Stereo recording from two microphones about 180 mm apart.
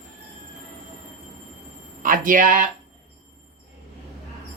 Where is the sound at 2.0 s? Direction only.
50° right (ahead or behind).